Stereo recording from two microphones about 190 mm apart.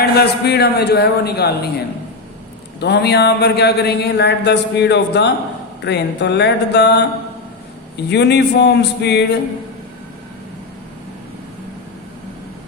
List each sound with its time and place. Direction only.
0.0 s speech: 60° left (ahead or behind)
2.8 s speech: 60° left (ahead or behind)
8.1 s speech: 60° left (ahead or behind)